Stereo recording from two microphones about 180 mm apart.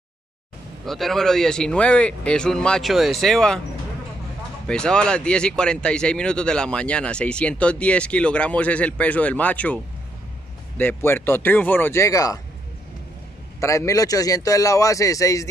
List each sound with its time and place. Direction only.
0.8 s speech: centre (ahead or behind)
4.6 s speech: 5° left (ahead or behind)
10.8 s speech: 10° left (ahead or behind)
13.6 s speech: 15° left (ahead or behind)